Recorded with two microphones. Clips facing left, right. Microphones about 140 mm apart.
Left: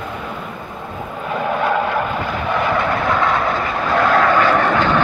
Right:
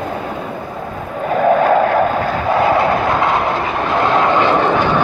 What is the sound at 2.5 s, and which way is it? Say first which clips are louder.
Train: right 5 dB; 35° right (ahead or behind).